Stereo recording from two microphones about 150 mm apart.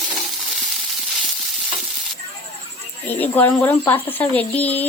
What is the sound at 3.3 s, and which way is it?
Speech, 15° left (ahead or behind).